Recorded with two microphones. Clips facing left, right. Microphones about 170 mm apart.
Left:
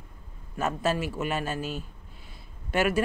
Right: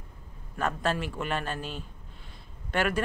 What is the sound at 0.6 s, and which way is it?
Speech, 5° left (ahead or behind).